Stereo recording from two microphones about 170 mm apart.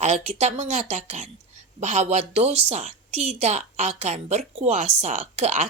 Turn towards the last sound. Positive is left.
turn(degrees=-40)  # may be behind; listen again after turning